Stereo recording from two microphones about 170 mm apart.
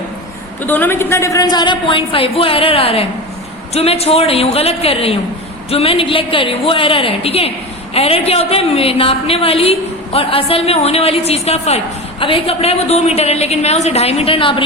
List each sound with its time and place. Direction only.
0.6 s a woman's voice: 10° left (ahead or behind); by 14.6 s 30° left (ahead or behind)